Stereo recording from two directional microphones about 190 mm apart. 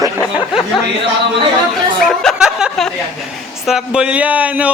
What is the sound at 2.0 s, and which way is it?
A man's voice, centre (ahead or behind).